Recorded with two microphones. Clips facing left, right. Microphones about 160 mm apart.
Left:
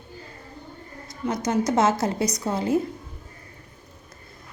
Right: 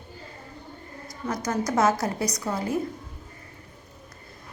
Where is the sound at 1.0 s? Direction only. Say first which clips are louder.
Left 3 dB; 25° left (ahead or behind).